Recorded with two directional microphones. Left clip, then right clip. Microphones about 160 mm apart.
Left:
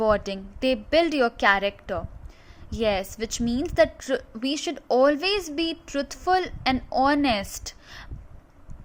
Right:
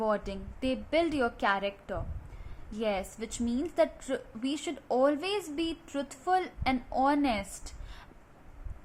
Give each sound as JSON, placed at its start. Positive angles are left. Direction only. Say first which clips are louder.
{"t": 0.0, "sound": "a woman's voice", "louder": "left 8 dB", "side_deg": 35}